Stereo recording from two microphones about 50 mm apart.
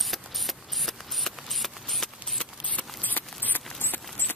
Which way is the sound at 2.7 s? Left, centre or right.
Left.